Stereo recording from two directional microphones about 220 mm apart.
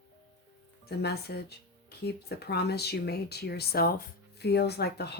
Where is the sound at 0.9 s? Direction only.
45° left (ahead or behind).